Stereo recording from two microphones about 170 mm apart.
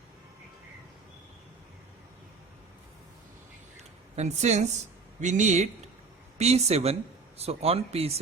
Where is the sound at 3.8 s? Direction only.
40° right (ahead or behind).